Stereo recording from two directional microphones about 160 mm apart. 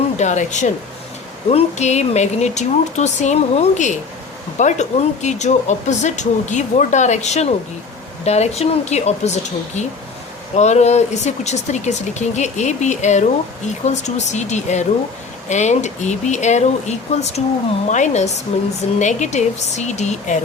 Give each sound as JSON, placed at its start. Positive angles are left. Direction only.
{"t": 0.2, "sound": "speech", "side_deg": 50}